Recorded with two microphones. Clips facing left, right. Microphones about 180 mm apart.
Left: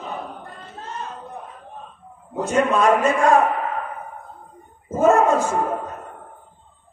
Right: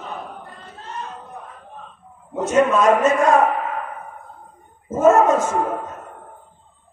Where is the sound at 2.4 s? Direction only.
30° left (ahead or behind).